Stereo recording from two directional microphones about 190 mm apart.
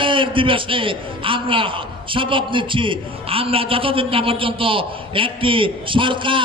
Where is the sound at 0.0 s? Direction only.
25° right (ahead or behind).